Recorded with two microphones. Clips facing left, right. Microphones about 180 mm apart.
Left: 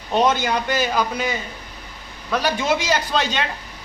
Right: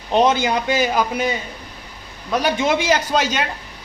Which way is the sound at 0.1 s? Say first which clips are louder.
Right 2 dB; 15° right (ahead or behind).